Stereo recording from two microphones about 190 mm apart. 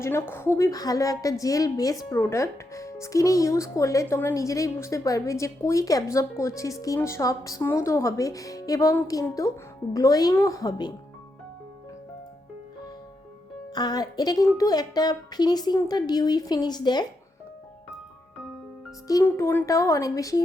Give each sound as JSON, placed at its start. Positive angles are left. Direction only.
{"t": 0.0, "sound": "a woman's voice", "side_deg": 15}
{"t": 13.7, "sound": "a woman's voice", "side_deg": 20}
{"t": 19.0, "sound": "a woman's voice", "side_deg": 15}